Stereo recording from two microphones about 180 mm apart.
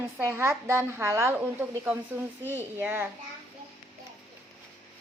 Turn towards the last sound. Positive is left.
turn(degrees=-10)  # may be behind; listen again after turning